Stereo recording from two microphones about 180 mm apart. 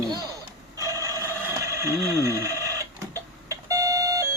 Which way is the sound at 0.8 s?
20° right (ahead or behind).